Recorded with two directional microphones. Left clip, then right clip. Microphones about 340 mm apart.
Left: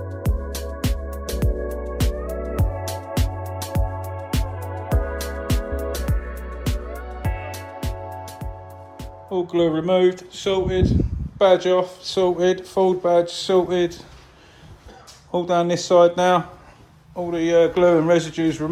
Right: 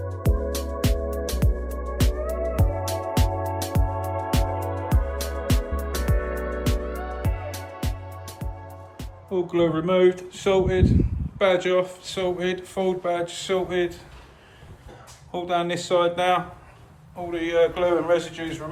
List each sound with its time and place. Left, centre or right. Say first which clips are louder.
0.2 s music: right 5 dB; centre
9.0 s speech: left 2 dB; centre
15.3 s speech: left 5 dB; centre